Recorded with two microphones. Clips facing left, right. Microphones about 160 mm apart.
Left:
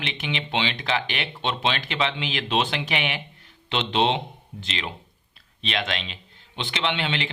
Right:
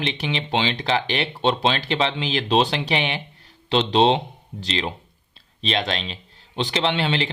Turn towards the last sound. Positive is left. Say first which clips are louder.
# right 4 dB
turn(degrees=-35)  # may be behind; listen again after turning